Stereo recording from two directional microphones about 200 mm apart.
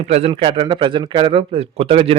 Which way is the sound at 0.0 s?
30° right (ahead or behind).